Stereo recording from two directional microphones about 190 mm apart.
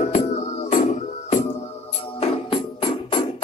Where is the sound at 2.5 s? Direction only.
30° left (ahead or behind).